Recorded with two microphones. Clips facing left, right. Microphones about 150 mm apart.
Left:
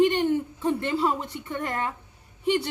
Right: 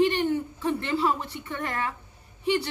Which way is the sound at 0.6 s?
20° left (ahead or behind).